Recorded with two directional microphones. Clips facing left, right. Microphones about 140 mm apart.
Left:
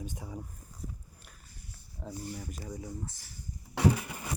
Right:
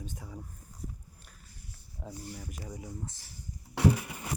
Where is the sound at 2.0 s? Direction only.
10° right (ahead or behind).